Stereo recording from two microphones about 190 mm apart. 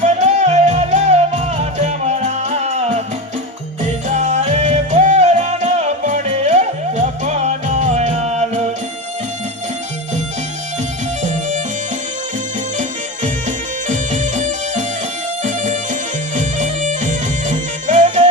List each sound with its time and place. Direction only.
0.0 s music: 40° right (ahead or behind)
4.1 s music: 35° right (ahead or behind)
11.2 s music: 40° right (ahead or behind)
13.8 s music: 40° right (ahead or behind)